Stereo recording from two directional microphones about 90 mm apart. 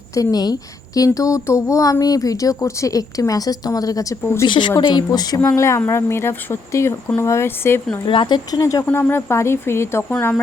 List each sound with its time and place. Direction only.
0.1 s a child's voice: 45° left (ahead or behind)
4.4 s speech: 60° left (ahead or behind)
5.5 s a child's voice: 30° left (ahead or behind)
8.0 s speech: 65° left (ahead or behind)
8.5 s a child's voice: 35° left (ahead or behind)
8.9 s speech: 25° left (ahead or behind)